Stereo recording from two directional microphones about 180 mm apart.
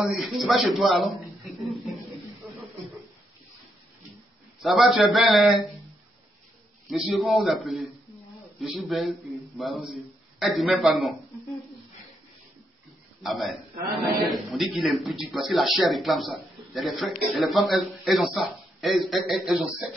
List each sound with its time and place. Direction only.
0.0 s a man's voice: centre (ahead or behind)
1.6 s a sound: centre (ahead or behind)
4.6 s a man's voice: centre (ahead or behind)
6.9 s a man's voice: centre (ahead or behind)
13.2 s a man's voice: centre (ahead or behind)